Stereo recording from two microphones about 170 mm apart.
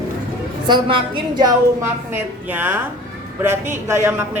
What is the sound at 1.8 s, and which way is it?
A woman's voice, 10° right (ahead or behind).